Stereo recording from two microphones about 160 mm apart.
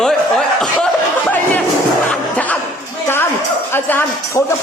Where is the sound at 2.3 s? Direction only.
10° left (ahead or behind).